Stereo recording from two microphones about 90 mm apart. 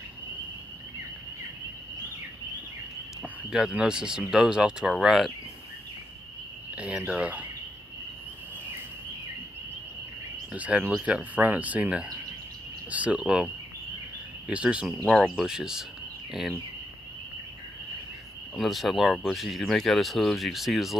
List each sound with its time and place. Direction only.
3.2 s speech: 5° right (ahead or behind)
6.7 s cricket: 15° right (ahead or behind)
7.1 s speech: 15° right (ahead or behind)
10.5 s speech: 15° right (ahead or behind)
14.5 s speech: 15° right (ahead or behind)
18.6 s speech: centre (ahead or behind)